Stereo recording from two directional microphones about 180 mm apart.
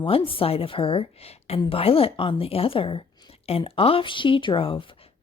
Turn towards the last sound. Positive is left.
turn(degrees=30)  # may be behind; listen again after turning